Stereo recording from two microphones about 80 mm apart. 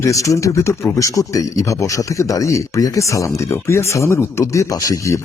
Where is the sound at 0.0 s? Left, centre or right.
Left.